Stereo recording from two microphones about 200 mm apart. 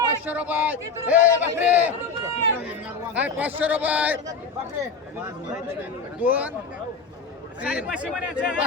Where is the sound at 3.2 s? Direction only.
10° right (ahead or behind).